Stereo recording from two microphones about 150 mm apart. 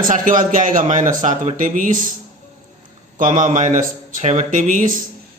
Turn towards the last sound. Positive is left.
turn(degrees=-65)  # may be behind; listen again after turning